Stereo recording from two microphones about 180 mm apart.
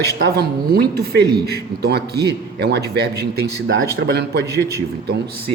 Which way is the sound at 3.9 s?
65° right (ahead or behind).